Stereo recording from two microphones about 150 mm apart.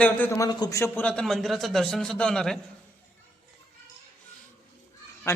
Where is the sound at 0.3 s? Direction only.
25° left (ahead or behind); by 2.6 s 5° left (ahead or behind).